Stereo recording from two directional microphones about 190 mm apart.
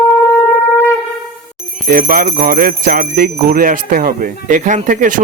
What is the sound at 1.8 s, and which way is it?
Jingle bell, 50° right (ahead or behind).